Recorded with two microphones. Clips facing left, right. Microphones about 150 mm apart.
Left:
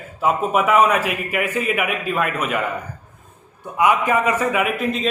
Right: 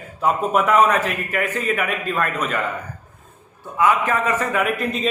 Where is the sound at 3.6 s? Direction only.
15° left (ahead or behind).